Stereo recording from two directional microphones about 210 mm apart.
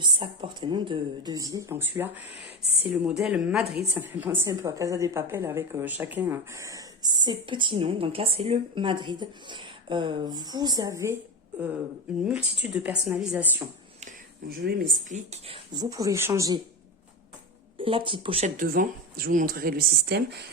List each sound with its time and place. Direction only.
0.0 s a woman's voice: 20° right (ahead or behind)
12.2 s speech: 5° right (ahead or behind)
14.5 s speech: 45° right (ahead or behind); by 16.6 s 15° right (ahead or behind)
17.7 s speech: 25° right (ahead or behind); by 20.2 s 50° right (ahead or behind)